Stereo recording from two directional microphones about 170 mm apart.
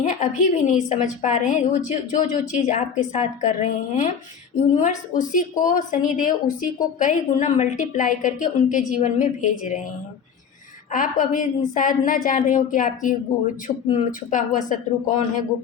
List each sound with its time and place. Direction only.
0.0 s a woman's voice: 45° left (ahead or behind)
10.9 s a woman's voice: 50° left (ahead or behind)